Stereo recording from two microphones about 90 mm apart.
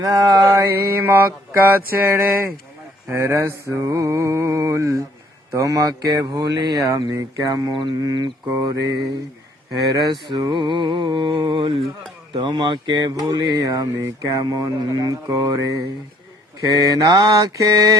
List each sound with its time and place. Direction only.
0.0 s speech: 45° right (ahead or behind)
0.4 s mantra: 30° right (ahead or behind)
6.2 s speech: 50° right (ahead or behind)
6.9 s mantra: 40° right (ahead or behind)
7.7 s mantra: 65° right (ahead or behind)
8.0 s speech: 45° right (ahead or behind)
9.9 s mantra: 50° right (ahead or behind); by 11.9 s 80° right
12.3 s speech: 60° right (ahead or behind); by 15.8 s 45° right (ahead or behind)
17.1 s speech: 45° right (ahead or behind)